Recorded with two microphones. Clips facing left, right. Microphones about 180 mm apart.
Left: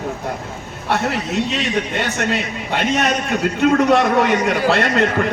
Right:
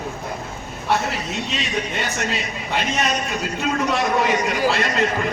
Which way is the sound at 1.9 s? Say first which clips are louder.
Left 5 dB; 60° left (ahead or behind).